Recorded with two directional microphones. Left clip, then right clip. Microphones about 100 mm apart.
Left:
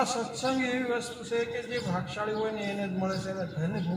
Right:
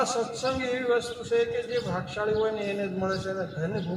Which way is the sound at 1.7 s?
50° right (ahead or behind).